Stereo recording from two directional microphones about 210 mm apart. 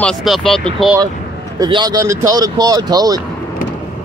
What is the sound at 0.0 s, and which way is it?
Speech, centre (ahead or behind).